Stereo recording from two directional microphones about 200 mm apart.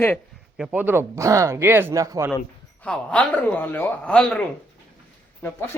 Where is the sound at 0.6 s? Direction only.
5° right (ahead or behind).